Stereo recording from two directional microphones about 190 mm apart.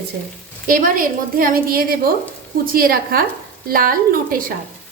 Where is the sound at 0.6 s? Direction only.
45° right (ahead or behind).